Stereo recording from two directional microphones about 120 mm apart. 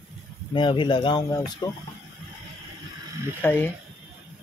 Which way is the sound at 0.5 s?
40° left (ahead or behind).